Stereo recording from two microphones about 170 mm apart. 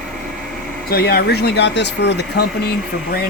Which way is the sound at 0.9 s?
65° left (ahead or behind).